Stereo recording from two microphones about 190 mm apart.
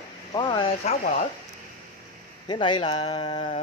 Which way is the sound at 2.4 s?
25° left (ahead or behind).